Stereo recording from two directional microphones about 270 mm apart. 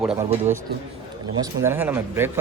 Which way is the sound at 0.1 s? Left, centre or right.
Right.